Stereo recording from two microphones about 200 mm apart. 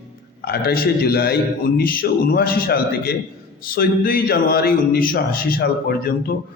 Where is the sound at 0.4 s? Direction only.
50° left (ahead or behind).